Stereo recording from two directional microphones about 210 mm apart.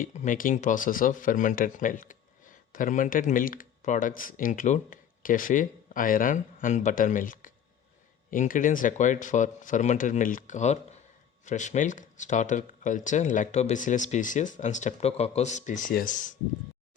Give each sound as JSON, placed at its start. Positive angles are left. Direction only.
{"t": 0.0, "sound": "speech", "side_deg": 35}